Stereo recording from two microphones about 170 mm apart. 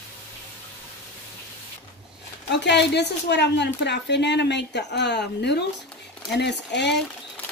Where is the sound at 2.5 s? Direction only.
90° left.